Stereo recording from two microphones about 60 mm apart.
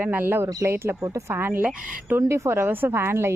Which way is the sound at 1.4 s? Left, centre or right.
Right.